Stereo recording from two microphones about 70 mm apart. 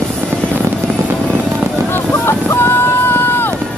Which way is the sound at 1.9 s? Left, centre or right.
Left.